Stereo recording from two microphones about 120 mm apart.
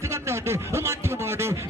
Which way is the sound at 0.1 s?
20° right (ahead or behind).